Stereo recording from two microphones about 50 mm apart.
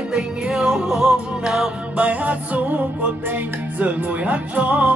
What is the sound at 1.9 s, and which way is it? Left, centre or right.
Music, right.